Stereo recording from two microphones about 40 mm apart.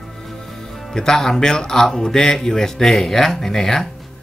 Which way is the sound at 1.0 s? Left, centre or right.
Centre.